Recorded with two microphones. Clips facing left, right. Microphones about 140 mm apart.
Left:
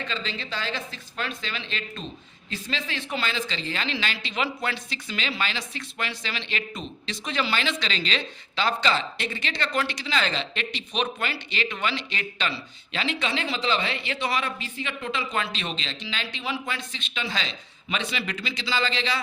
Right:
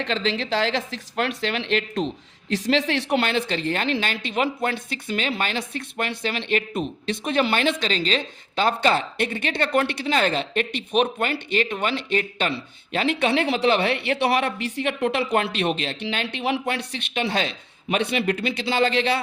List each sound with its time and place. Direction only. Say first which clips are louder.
0.0 s a woman's voice: right 8 dB; 80° right
2.5 s speech: right 11 dB; 85° right; by 19.2 s 55° right (ahead or behind)